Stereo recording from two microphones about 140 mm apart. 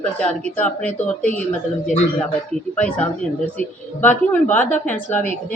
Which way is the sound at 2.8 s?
10° left (ahead or behind).